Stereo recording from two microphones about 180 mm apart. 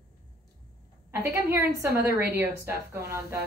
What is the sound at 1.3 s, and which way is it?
Speech, 15° right (ahead or behind).